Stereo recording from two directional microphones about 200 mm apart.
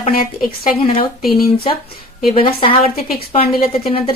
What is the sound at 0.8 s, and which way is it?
Speech, 30° left (ahead or behind).